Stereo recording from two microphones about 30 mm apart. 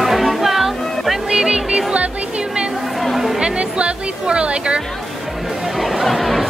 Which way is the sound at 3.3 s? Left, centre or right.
Right.